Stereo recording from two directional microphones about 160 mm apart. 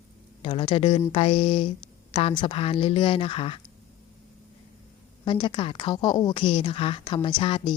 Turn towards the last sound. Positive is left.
turn(degrees=30)  # may be behind; listen again after turning